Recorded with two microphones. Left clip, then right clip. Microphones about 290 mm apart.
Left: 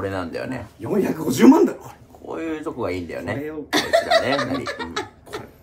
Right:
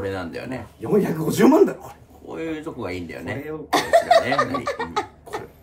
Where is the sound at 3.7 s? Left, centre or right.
Centre.